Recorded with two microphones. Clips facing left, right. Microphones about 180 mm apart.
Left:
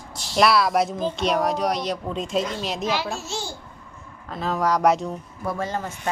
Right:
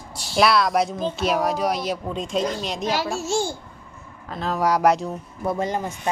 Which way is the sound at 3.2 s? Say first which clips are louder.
Right 8 dB; 45° right (ahead or behind).